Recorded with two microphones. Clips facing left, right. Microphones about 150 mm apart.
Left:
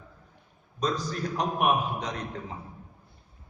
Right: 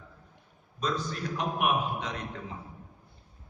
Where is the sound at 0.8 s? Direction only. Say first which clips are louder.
Left 3 dB; 40° left (ahead or behind).